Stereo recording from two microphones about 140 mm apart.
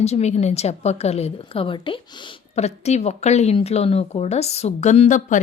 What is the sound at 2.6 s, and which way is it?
A woman's voice, 50° left (ahead or behind).